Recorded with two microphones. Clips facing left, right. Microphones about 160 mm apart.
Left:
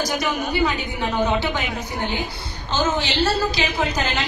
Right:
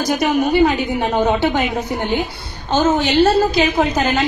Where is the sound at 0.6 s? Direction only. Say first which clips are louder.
Right 7 dB; 50° right (ahead or behind).